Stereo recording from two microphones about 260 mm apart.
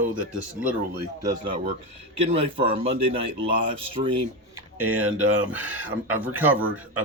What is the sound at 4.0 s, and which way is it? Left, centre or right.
Speech, right.